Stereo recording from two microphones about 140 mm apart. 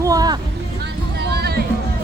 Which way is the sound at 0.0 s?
25° right (ahead or behind).